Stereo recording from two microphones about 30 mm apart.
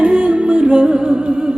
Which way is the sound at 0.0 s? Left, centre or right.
Right.